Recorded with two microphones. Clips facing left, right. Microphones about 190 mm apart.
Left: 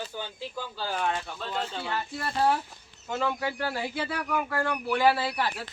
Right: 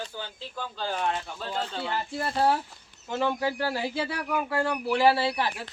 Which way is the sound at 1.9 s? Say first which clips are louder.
Right 2 dB; 25° right (ahead or behind).